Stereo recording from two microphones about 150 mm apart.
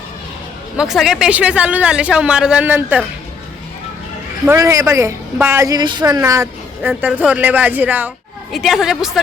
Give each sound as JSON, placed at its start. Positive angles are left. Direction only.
{"t": 0.8, "sound": "speech", "side_deg": -5}
{"t": 4.4, "sound": "a woman's voice", "side_deg": -20}
{"t": 8.5, "sound": "a woman's voice", "side_deg": 0}